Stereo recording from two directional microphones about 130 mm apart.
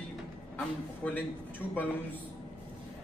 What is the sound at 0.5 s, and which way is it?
A man's voice, 10° left (ahead or behind).